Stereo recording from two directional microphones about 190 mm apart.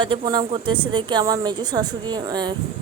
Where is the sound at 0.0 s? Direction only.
25° right (ahead or behind).